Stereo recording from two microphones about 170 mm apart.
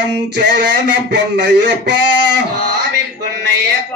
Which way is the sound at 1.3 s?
90° right.